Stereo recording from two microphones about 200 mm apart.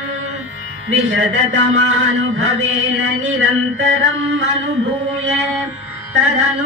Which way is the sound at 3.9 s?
65° right (ahead or behind).